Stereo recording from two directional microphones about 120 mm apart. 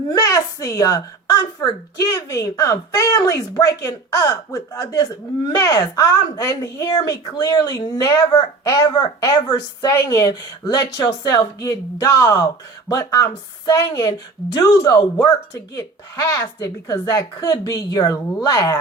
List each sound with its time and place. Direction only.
0.1 s speech: 30° left (ahead or behind)